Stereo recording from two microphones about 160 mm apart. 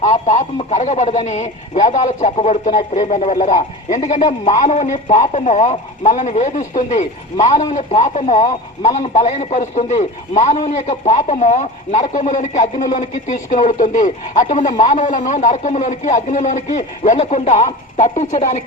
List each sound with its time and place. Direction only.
0.0 s a man's voice: 50° left (ahead or behind)